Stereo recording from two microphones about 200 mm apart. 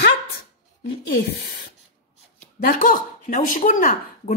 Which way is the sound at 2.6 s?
45° left (ahead or behind).